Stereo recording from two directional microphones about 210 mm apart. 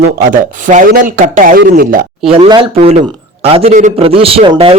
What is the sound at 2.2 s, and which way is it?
A man's voice, 25° right (ahead or behind).